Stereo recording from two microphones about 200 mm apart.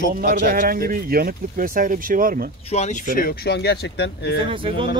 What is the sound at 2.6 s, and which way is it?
Speech, 35° left (ahead or behind).